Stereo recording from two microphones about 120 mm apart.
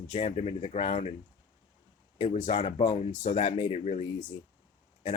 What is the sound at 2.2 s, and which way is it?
Speech, 75° left (ahead or behind).